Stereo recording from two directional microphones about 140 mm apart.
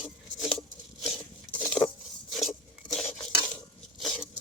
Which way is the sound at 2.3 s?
Centre (ahead or behind).